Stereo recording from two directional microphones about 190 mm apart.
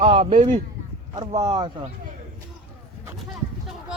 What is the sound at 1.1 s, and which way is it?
Speech, 15° right (ahead or behind).